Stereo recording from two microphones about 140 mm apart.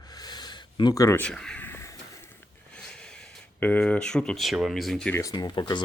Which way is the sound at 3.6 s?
15° left (ahead or behind).